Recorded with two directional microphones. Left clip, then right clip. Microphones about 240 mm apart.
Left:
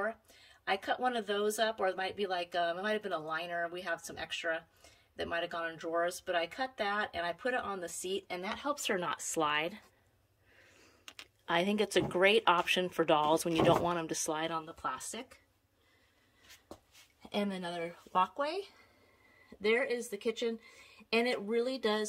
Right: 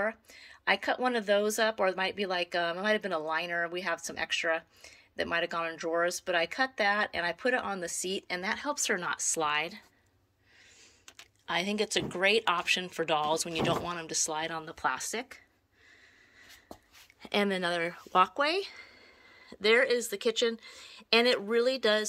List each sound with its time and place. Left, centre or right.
0.5 s speech: centre
11.1 s speech: centre
14.7 s speech: centre
17.2 s speech: centre